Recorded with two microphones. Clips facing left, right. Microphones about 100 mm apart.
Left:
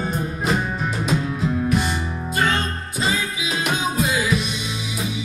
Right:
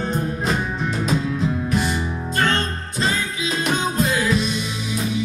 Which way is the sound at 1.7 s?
Centre (ahead or behind).